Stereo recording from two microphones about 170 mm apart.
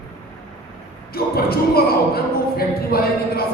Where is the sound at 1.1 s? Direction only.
65° left (ahead or behind).